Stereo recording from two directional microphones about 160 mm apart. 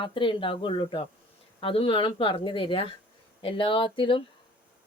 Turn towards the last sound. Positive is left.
turn(degrees=35)  # may be behind; listen again after turning